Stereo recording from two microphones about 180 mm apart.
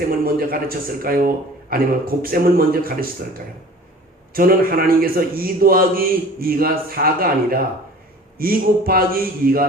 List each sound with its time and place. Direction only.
0.3 s a man's voice: 55° right (ahead or behind)
4.4 s a man's voice: 55° right (ahead or behind)